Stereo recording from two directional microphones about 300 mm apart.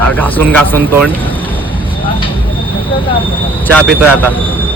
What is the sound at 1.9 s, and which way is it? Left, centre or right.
Vehicle, centre.